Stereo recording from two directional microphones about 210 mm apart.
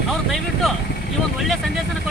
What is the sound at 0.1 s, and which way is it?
Vehicle, centre (ahead or behind).